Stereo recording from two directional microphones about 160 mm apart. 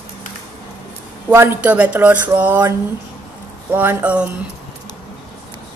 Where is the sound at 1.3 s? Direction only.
15° right (ahead or behind).